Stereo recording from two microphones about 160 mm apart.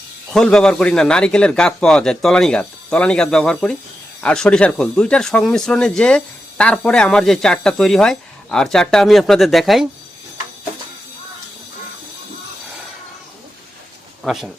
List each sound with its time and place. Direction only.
0.3 s speech: 5° left (ahead or behind)
14.3 s speech: centre (ahead or behind)